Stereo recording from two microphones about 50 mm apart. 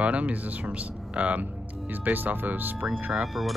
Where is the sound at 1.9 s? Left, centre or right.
Right.